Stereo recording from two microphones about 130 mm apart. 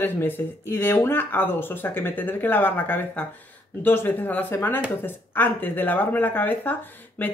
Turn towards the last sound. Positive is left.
turn(degrees=15)  # may be behind; listen again after turning